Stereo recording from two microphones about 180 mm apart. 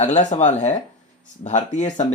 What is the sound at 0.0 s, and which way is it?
Speech, 40° left (ahead or behind).